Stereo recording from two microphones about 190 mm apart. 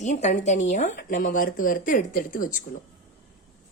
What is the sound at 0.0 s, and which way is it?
Speech, 40° left (ahead or behind).